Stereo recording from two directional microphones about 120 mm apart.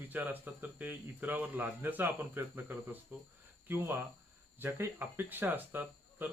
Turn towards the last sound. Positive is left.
turn(degrees=-15)  # may be behind; listen again after turning